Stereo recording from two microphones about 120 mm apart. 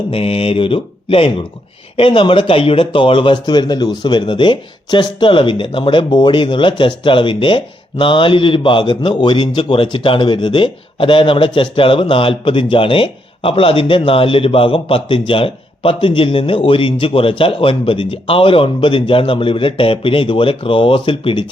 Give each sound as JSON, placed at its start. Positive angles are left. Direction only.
{"t": 0.1, "sound": "speech", "side_deg": 55}